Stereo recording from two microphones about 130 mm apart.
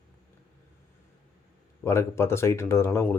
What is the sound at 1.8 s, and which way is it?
Speech, 20° left (ahead or behind).